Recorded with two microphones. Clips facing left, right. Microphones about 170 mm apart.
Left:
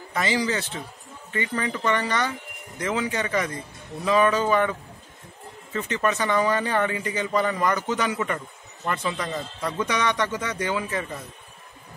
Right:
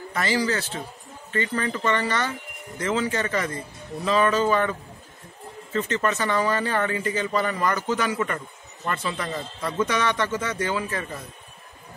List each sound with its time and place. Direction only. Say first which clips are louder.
0.1 s speech: even; 20° left (ahead or behind)
9.6 s a man's voice: right 3 dB; centre (ahead or behind)
9.8 s speech: even; 15° left (ahead or behind)